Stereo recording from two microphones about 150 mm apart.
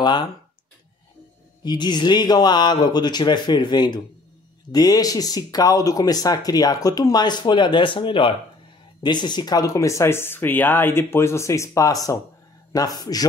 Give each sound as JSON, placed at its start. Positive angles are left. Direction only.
{"t": 0.0, "sound": "speech", "side_deg": 30}
{"t": 1.6, "sound": "speech", "side_deg": 30}